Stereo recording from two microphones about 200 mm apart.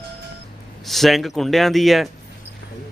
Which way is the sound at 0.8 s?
Centre (ahead or behind).